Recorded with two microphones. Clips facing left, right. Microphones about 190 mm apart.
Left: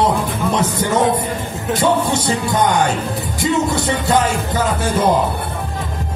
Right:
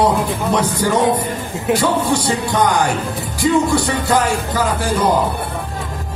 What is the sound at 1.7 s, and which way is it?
Music, 10° right (ahead or behind).